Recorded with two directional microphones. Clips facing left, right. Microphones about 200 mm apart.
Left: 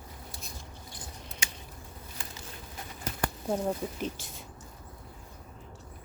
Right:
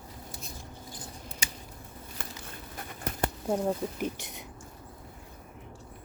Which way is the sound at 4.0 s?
20° right (ahead or behind).